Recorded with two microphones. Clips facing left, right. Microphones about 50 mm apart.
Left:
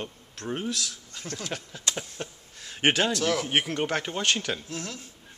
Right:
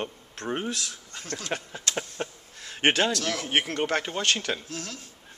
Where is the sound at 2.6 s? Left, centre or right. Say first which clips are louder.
Right 1 dB; centre.